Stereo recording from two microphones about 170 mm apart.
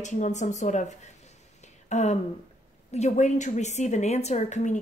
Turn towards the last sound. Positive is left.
turn(degrees=45)  # may be behind; listen again after turning